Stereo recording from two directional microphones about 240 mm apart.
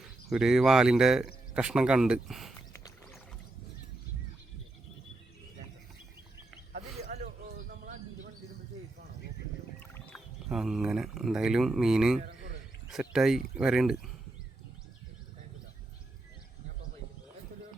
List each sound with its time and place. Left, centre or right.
0.0 s speech: centre
2.7 s music: centre
7.4 s bird: right
9.8 s speech: centre